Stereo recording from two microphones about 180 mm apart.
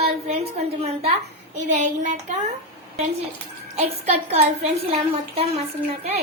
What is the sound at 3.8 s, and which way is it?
A woman's voice, 35° right (ahead or behind).